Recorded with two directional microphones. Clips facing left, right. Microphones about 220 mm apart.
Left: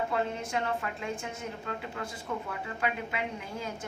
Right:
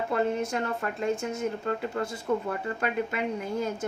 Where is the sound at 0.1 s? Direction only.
45° right (ahead or behind).